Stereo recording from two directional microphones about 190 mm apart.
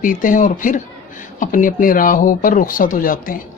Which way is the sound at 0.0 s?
45° left (ahead or behind).